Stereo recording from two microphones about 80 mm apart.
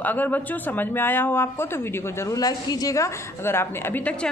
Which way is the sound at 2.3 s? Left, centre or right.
Left.